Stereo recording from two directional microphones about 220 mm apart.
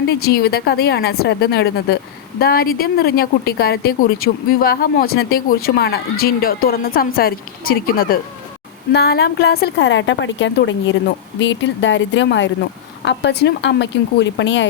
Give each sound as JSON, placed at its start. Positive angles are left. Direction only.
{"t": 0.1, "sound": "a woman's voice", "side_deg": 45}